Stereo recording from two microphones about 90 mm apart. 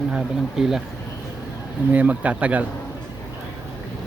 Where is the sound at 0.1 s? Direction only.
10° right (ahead or behind).